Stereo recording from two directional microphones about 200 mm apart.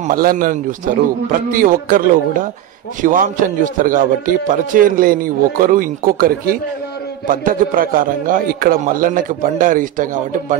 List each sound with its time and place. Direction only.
0.0 s a man's voice: 45° right (ahead or behind)